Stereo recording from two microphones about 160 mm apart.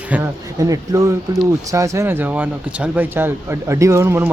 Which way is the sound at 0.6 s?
20° right (ahead or behind).